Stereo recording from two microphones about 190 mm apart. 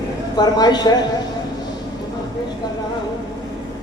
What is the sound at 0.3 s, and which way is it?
Speech, 20° left (ahead or behind).